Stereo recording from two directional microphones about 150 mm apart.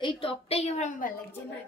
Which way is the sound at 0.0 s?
40° left (ahead or behind).